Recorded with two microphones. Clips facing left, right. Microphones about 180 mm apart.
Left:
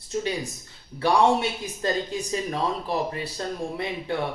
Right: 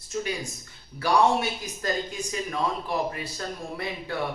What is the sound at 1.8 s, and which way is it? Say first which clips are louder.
Speech: left 4 dB; 30° left (ahead or behind).